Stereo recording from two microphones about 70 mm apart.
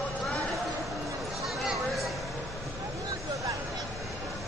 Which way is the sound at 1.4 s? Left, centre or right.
Centre.